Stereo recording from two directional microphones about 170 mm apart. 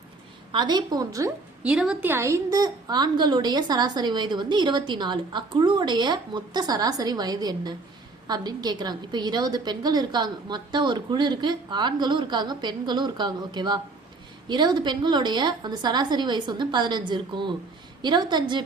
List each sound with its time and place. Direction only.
0.5 s a woman's voice: 25° right (ahead or behind)
1.6 s a woman's voice: 5° right (ahead or behind); by 18.6 s 25° right (ahead or behind)